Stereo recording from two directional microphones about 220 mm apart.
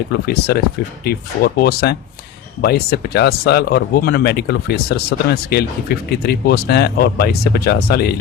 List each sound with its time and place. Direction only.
0.1 s speech: 45° left (ahead or behind)